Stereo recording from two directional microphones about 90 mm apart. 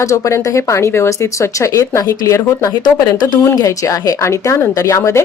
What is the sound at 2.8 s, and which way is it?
Speech, 50° left (ahead or behind).